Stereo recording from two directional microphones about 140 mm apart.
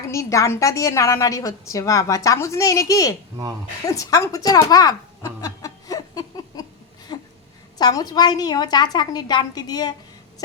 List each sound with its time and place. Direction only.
0.1 s a woman's voice: 20° left (ahead or behind)
3.8 s a sound: 25° left (ahead or behind)
7.8 s a woman's voice: 30° left (ahead or behind)